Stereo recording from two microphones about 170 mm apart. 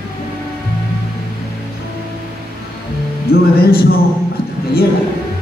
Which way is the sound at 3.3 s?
65° left (ahead or behind).